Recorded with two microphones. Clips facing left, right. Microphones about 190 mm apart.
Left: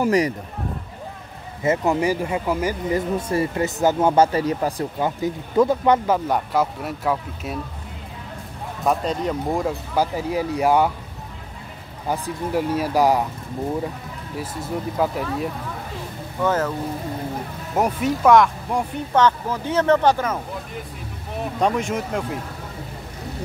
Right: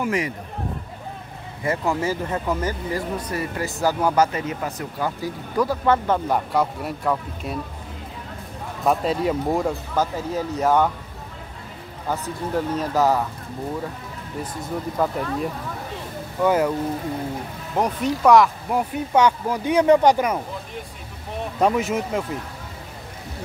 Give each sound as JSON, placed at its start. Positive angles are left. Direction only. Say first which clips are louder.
{"t": 0.0, "sound": "speech", "louder": "left 5 dB", "side_deg": 40}
{"t": 1.6, "sound": "speech", "louder": "left 4 dB", "side_deg": 20}
{"t": 3.2, "sound": "speech", "louder": "left 5 dB", "side_deg": 25}
{"t": 4.9, "sound": "speech", "louder": "left 3 dB", "side_deg": 20}
{"t": 6.0, "sound": "speech", "louder": "left 1 dB", "side_deg": 5}
{"t": 8.8, "sound": "speech", "louder": "right 1 dB", "side_deg": -5}
{"t": 9.9, "sound": "speech", "louder": "left 4 dB", "side_deg": 10}
{"t": 12.1, "sound": "speech", "louder": "left 2 dB", "side_deg": 10}
{"t": 14.4, "sound": "speech", "louder": "left 1 dB", "side_deg": 5}
{"t": 16.4, "sound": "speech", "louder": "right 2 dB", "side_deg": -10}
{"t": 17.7, "sound": "speech", "louder": "left 1 dB", "side_deg": 5}
{"t": 21.5, "sound": "speech", "louder": "right 2 dB", "side_deg": -5}